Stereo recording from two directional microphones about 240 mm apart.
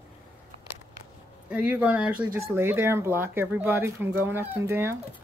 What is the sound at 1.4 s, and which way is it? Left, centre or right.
Speech, centre.